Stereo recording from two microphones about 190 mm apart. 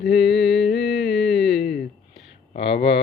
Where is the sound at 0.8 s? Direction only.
65° left (ahead or behind).